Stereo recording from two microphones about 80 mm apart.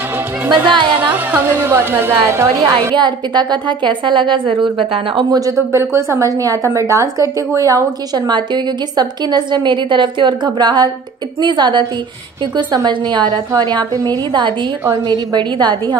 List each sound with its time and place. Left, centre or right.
0.7 s a woman's voice: right
0.9 s music: right
1.4 s a woman's voice: right
3.0 s a woman's voice: right
5.7 s a woman's voice: right
8.3 s a woman's voice: right
14.0 s a woman's voice: right